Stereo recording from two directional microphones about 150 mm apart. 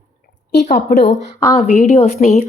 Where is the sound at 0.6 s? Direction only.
50° left (ahead or behind).